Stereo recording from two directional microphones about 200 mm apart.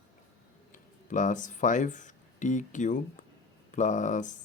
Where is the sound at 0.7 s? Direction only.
40° left (ahead or behind).